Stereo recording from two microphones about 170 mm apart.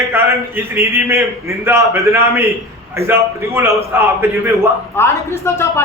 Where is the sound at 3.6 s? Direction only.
15° right (ahead or behind).